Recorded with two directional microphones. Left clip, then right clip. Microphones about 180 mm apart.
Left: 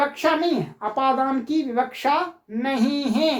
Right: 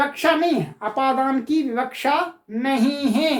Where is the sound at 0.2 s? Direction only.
20° left (ahead or behind).